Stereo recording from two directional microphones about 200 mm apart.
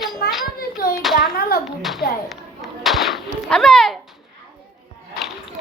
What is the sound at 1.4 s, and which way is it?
Clapping, 50° left (ahead or behind).